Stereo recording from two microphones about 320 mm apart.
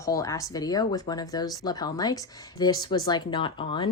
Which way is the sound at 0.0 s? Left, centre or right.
Centre.